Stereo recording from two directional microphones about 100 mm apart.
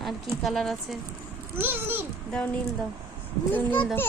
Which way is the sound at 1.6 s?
20° right (ahead or behind).